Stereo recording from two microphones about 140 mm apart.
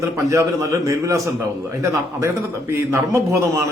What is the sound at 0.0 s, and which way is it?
A man's voice, 20° right (ahead or behind).